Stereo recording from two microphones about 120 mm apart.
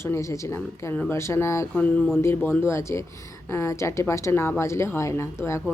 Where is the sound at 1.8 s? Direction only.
10° left (ahead or behind).